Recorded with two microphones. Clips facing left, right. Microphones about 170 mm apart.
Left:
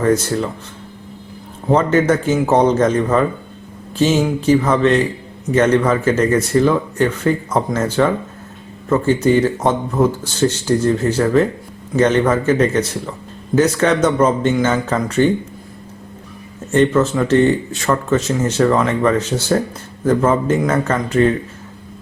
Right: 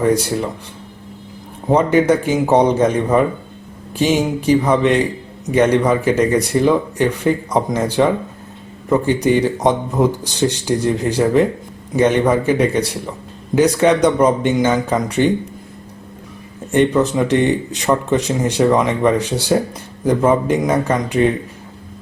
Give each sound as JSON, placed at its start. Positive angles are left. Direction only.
{"t": 0.0, "sound": "speech", "side_deg": -15}
{"t": 1.7, "sound": "speech", "side_deg": -15}
{"t": 16.7, "sound": "speech", "side_deg": -15}